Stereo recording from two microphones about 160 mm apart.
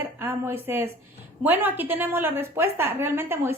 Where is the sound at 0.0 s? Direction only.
10° right (ahead or behind).